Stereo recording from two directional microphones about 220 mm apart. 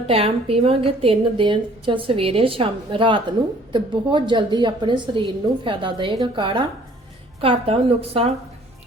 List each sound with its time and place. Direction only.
0.1 s a woman's voice: 25° right (ahead or behind)